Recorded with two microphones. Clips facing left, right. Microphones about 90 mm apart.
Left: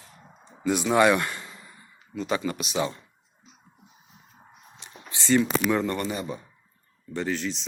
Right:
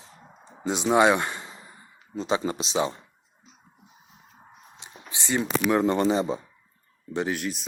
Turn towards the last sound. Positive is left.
turn(degrees=-10)  # may be behind; listen again after turning